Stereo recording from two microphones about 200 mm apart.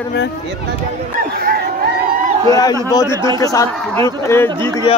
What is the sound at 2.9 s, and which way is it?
A man's voice, 15° left (ahead or behind).